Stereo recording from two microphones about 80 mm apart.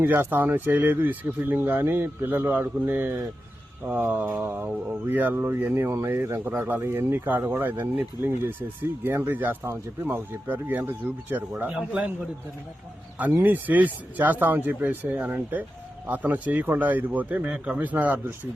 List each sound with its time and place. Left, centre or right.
0.0 s speech: right
6.6 s a man's voice: right
13.4 s speech: right